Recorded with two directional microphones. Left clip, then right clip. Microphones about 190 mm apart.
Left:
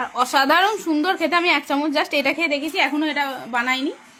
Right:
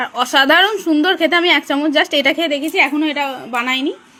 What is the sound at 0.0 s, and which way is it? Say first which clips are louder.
A woman's voice: right 4 dB; 15° right (ahead or behind).